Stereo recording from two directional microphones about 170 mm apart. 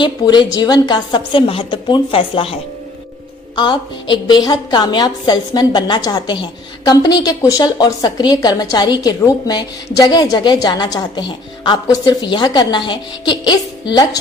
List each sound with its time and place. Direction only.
0.0 s a woman's voice: 25° left (ahead or behind)